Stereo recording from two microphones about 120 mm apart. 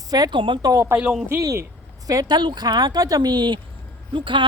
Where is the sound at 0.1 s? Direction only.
35° right (ahead or behind).